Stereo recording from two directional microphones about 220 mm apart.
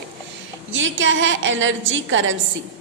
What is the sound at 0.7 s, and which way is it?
A woman's voice, 60° right (ahead or behind).